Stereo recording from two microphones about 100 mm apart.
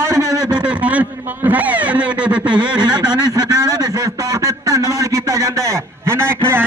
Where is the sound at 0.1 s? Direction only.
30° right (ahead or behind).